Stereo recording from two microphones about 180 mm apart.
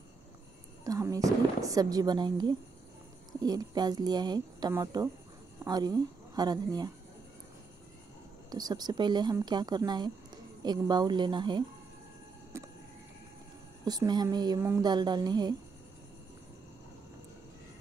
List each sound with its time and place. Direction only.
0.8 s a woman's voice: 20° right (ahead or behind)
8.5 s speech: 20° right (ahead or behind)
12.5 s vehicle: 15° right (ahead or behind)
13.8 s speech: 25° right (ahead or behind)